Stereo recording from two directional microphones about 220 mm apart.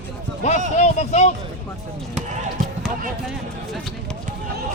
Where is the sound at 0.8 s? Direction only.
30° left (ahead or behind).